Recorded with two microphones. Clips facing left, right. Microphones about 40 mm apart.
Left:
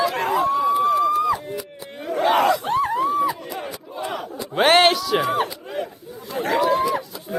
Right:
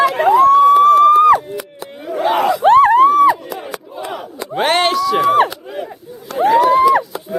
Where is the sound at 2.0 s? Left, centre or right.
Centre.